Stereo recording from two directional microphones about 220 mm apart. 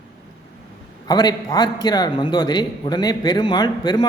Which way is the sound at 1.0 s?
20° left (ahead or behind).